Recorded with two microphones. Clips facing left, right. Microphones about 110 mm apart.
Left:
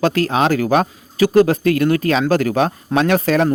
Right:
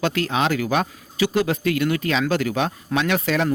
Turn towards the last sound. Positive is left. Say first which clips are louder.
# left 6 dB
turn(degrees=40)  # may be behind; listen again after turning